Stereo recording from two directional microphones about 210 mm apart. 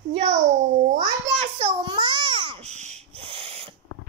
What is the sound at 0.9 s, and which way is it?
Babbling, 30° right (ahead or behind).